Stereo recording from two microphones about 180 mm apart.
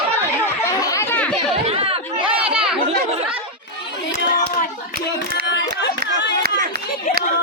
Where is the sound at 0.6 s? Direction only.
15° left (ahead or behind).